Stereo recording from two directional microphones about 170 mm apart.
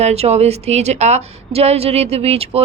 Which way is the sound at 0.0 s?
40° right (ahead or behind).